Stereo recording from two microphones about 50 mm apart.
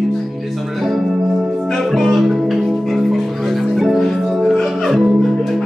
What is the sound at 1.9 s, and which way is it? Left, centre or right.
Music, centre.